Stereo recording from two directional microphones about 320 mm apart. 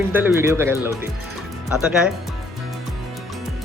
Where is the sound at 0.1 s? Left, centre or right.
Centre.